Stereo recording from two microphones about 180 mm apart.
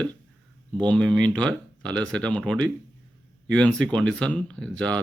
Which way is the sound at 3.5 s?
5° left (ahead or behind).